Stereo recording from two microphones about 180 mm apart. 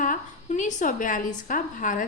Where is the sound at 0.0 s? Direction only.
45° left (ahead or behind).